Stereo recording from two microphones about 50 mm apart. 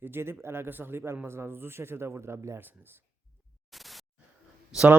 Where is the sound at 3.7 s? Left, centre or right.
Centre.